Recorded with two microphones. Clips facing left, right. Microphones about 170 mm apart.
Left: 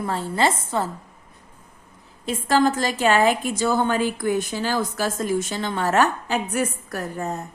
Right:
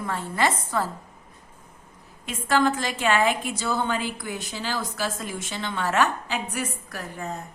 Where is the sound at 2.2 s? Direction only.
35° left (ahead or behind).